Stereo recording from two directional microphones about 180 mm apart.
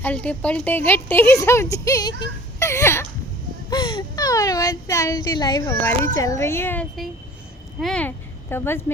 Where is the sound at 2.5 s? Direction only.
15° left (ahead or behind).